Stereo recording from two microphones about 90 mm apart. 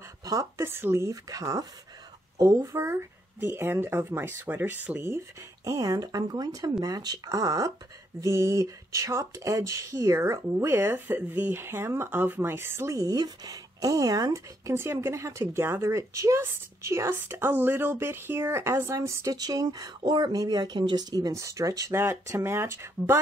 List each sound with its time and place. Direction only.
0.2 s a sound: 40° right (ahead or behind)
0.7 s a woman's voice: 25° right (ahead or behind)
5.6 s a woman's voice: 40° right (ahead or behind)
19.3 s speech: 45° right (ahead or behind)
21.9 s a woman's voice: 30° right (ahead or behind)